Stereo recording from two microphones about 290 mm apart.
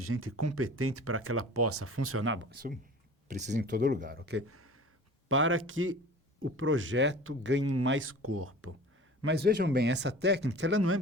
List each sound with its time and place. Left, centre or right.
0.0 s speech: right
4.2 s speech: right
9.2 s speech: right